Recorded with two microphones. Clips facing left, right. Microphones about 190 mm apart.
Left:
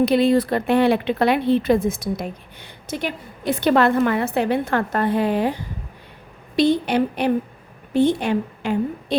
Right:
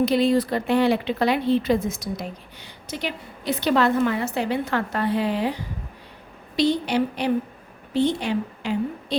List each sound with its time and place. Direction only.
0.0 s speech: 60° left (ahead or behind)
6.6 s a woman's voice: 55° left (ahead or behind)